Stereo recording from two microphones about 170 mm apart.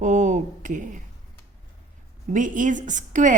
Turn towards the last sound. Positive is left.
turn(degrees=-45)  # may be behind; listen again after turning